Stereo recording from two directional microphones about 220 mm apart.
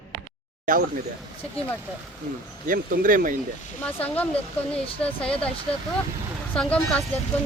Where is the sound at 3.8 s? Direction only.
5° left (ahead or behind).